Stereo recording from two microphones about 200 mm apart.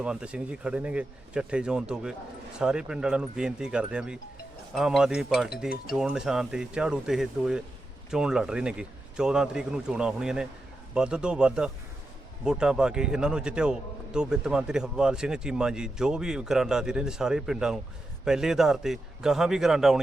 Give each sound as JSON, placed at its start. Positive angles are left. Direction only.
{"t": 0.0, "sound": "a man's voice", "side_deg": -5}